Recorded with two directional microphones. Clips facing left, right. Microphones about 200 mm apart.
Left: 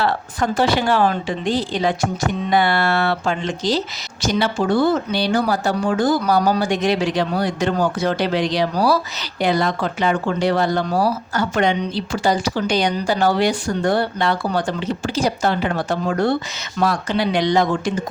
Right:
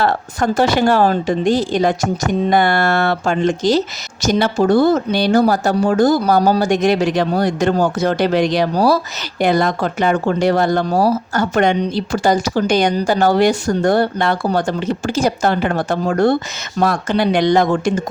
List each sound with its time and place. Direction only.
0.0 s speech: 45° right (ahead or behind)